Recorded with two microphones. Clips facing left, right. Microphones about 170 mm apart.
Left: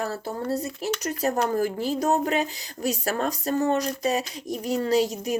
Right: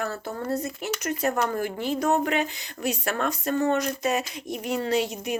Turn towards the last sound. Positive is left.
turn(degrees=40)  # may be behind; listen again after turning